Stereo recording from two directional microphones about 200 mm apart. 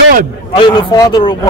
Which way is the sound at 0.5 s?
20° left (ahead or behind).